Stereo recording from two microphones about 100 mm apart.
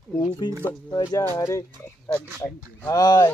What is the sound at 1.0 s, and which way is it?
Speech, 30° left (ahead or behind).